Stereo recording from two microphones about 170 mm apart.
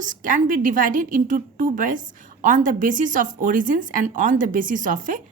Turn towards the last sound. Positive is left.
turn(degrees=-50)  # may be behind; listen again after turning